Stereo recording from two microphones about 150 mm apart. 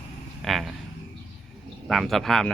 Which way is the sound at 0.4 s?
Centre (ahead or behind).